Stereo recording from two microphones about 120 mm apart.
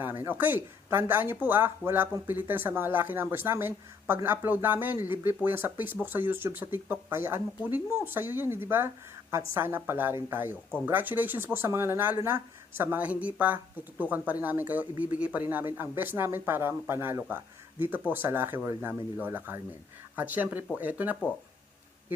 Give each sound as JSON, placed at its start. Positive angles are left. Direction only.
{"t": 0.0, "sound": "speech", "side_deg": -15}